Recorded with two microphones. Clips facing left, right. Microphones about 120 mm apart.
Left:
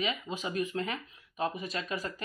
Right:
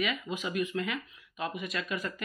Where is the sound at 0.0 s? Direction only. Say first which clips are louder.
Right 1 dB; 30° left (ahead or behind).